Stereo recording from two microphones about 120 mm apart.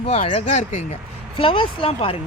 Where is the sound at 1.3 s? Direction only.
45° left (ahead or behind).